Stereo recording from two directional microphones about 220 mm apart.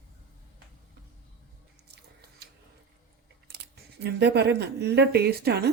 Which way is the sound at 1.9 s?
50° right (ahead or behind).